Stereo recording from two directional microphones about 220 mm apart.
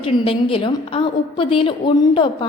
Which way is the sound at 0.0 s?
25° left (ahead or behind).